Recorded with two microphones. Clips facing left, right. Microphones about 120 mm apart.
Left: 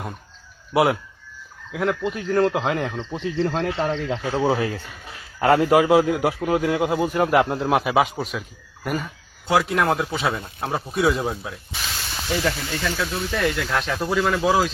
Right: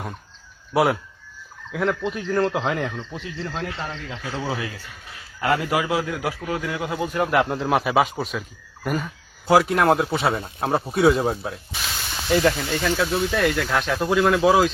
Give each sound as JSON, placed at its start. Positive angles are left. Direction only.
{"t": 0.7, "sound": "speech", "side_deg": 0}
{"t": 2.7, "sound": "speech", "side_deg": 20}
{"t": 3.4, "sound": "a man's voice", "side_deg": 35}
{"t": 7.4, "sound": "speech", "side_deg": 0}
{"t": 11.3, "sound": "snake", "side_deg": -5}
{"t": 12.4, "sound": "speech", "side_deg": -5}